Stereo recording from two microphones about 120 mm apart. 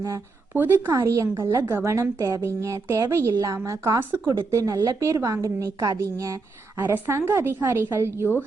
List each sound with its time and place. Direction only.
0.5 s a woman's voice: 15° right (ahead or behind)